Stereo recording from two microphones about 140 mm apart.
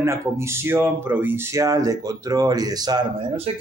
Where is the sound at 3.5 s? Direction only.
45° right (ahead or behind).